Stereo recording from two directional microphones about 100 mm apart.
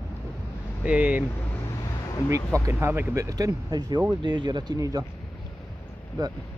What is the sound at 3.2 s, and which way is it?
Speech, 35° right (ahead or behind).